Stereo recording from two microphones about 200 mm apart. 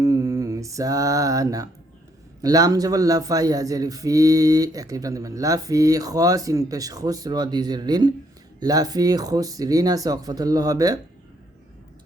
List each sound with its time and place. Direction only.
0.0 s mantra: 15° right (ahead or behind)
2.4 s a man's voice: 20° right (ahead or behind)